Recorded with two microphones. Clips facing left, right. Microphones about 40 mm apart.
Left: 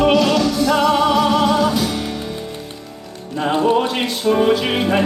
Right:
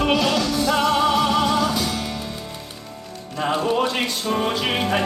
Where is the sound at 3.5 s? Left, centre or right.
Centre.